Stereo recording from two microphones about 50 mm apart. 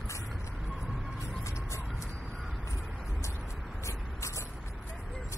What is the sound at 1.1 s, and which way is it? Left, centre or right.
Vehicle, left.